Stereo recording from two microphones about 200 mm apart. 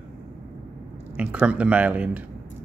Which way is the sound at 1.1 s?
5° right (ahead or behind).